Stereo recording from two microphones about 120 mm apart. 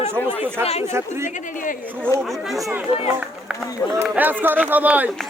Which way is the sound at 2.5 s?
Centre (ahead or behind).